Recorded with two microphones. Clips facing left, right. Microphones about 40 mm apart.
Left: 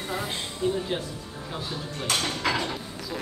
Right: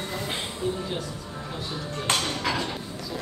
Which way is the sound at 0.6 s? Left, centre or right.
Left.